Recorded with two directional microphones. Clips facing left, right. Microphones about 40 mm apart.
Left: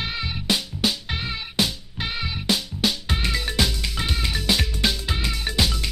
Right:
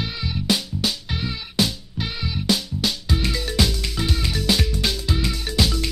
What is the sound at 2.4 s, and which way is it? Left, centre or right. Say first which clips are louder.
Music: right 1 dB; left.